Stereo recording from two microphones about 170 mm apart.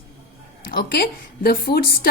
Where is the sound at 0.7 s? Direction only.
65° left (ahead or behind).